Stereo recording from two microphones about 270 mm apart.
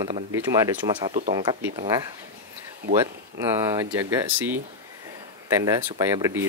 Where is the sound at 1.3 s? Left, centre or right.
Centre.